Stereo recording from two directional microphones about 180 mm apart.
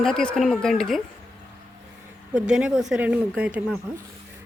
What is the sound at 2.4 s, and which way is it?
Speech, 5° right (ahead or behind).